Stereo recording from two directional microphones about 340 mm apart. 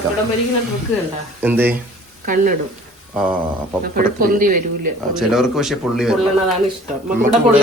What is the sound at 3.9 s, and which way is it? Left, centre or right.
Speech, right.